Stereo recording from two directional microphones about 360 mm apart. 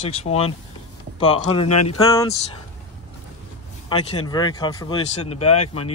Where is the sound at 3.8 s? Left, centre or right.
Centre.